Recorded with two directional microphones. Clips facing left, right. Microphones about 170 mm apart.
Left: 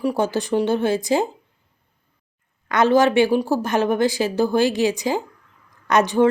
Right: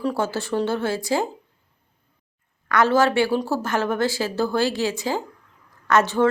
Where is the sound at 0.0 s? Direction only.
15° left (ahead or behind).